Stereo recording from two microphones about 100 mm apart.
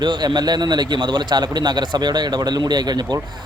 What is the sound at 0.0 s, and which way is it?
A man's voice, 50° right (ahead or behind).